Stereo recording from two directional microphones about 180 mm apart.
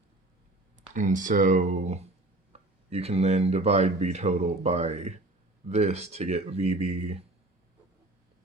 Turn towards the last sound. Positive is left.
turn(degrees=-35)  # may be behind; listen again after turning